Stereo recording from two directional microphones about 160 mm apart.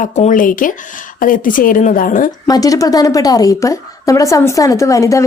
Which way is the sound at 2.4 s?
25° left (ahead or behind).